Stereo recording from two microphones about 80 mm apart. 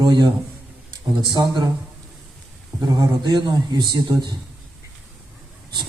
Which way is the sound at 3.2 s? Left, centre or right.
Right.